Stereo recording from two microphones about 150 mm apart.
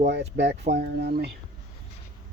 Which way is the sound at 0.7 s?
90° right.